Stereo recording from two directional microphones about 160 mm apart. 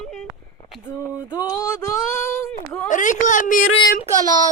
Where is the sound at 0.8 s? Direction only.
15° left (ahead or behind).